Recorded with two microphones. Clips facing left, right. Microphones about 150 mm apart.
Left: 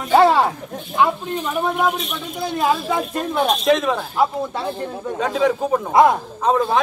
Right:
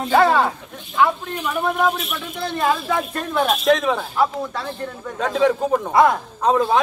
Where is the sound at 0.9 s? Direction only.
15° left (ahead or behind).